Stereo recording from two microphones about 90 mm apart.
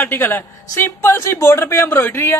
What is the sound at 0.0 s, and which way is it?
Speech, 25° left (ahead or behind).